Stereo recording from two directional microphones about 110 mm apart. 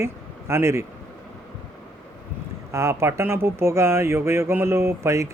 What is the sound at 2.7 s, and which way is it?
Speech, 25° right (ahead or behind).